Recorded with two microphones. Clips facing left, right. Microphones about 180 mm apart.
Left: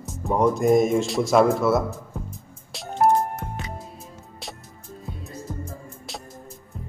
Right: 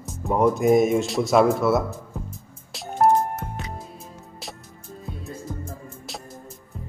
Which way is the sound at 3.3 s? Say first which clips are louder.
Even; centre (ahead or behind).